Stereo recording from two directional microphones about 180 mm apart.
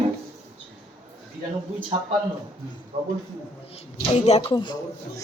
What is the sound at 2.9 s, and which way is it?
Speech, 30° right (ahead or behind).